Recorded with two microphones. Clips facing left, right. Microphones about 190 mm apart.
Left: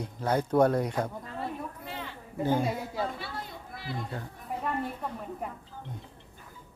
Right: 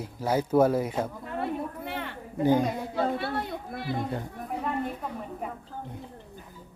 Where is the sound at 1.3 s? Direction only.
60° right (ahead or behind).